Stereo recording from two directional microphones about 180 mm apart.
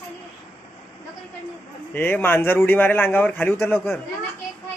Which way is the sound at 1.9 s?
10° left (ahead or behind).